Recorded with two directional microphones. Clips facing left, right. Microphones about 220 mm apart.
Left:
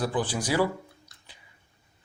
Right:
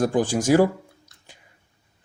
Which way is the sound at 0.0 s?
45° right (ahead or behind).